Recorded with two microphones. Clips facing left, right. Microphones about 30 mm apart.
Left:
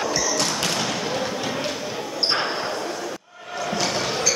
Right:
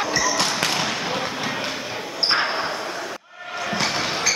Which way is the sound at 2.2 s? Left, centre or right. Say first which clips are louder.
Right 3 dB; centre.